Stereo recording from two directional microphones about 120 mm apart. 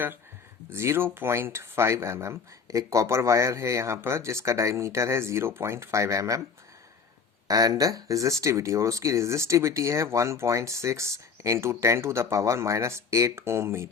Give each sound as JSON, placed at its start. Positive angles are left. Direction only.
{"t": 0.7, "sound": "speech", "side_deg": -20}
{"t": 7.4, "sound": "speech", "side_deg": -30}